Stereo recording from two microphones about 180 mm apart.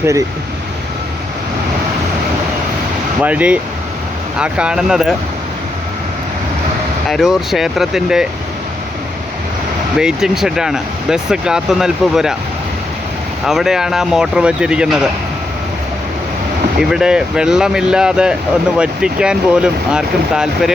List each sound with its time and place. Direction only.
0.0 s speech: 15° right (ahead or behind)
3.2 s speech: 5° right (ahead or behind)
7.1 s speech: centre (ahead or behind)
10.0 s speech: 5° right (ahead or behind)
13.4 s speech: centre (ahead or behind)
16.9 s speech: 5° right (ahead or behind)